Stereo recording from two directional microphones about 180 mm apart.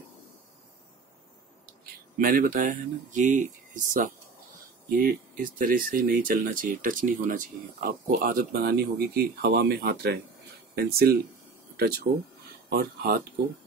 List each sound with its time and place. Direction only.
2.1 s speech: 50° right (ahead or behind)
12.6 s speech: 60° right (ahead or behind)